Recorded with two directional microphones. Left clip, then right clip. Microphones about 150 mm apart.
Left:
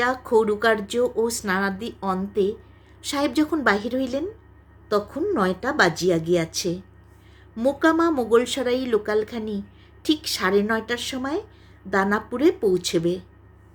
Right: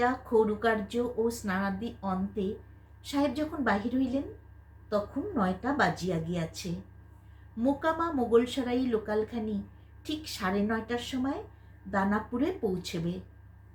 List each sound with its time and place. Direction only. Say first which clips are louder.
0.0 s a woman's voice: left 6 dB; 90° left